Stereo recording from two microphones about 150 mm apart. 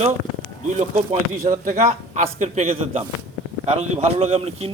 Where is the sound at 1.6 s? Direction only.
60° right (ahead or behind); by 4.7 s 45° right (ahead or behind).